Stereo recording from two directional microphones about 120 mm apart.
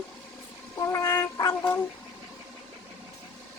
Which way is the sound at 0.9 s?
25° left (ahead or behind).